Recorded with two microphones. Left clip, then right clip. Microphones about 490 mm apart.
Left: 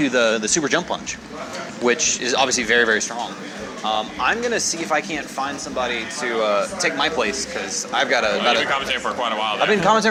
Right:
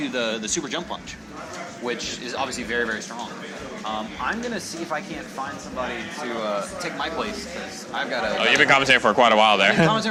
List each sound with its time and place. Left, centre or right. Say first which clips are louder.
0.0 s speech: left 8 dB; left
6.4 s speech: left 9 dB; left
8.4 s a man's voice: right 2 dB; right
9.8 s speech: left 4 dB; left